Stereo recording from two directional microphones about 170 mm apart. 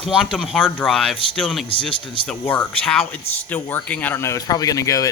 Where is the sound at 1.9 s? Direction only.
30° left (ahead or behind).